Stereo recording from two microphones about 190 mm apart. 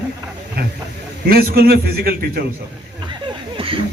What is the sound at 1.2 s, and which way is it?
Speech, 55° right (ahead or behind).